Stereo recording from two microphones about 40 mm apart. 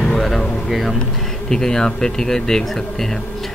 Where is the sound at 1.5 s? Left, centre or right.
Centre.